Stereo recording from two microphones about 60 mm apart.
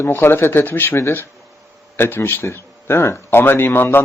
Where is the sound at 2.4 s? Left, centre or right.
Left.